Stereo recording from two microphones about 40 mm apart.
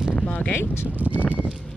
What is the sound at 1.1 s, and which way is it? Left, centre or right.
Speech, left.